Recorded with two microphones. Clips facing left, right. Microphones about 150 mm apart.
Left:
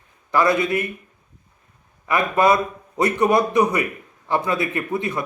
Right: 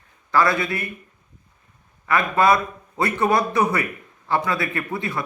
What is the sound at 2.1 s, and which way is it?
A man's voice, 20° left (ahead or behind).